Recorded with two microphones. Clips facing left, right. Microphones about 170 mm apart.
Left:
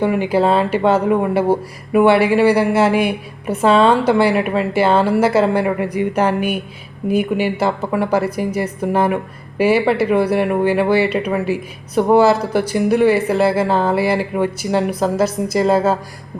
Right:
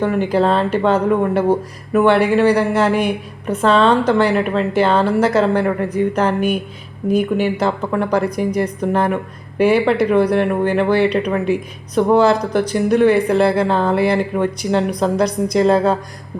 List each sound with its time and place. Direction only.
0.0 s speech: 10° left (ahead or behind)